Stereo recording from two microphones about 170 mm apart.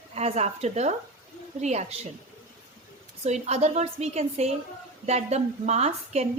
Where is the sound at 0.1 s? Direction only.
40° right (ahead or behind).